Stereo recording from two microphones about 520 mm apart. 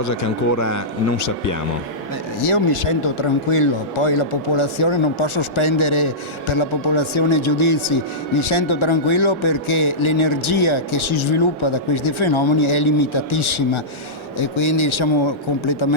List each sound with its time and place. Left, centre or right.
0.0 s speech: left
2.5 s speech: left